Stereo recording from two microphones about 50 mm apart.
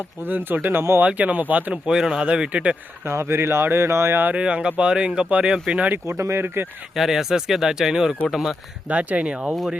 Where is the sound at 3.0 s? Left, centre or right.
Right.